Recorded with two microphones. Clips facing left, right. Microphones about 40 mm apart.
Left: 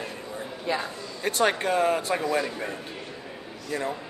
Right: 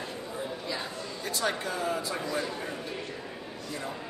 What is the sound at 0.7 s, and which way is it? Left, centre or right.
Speech, left.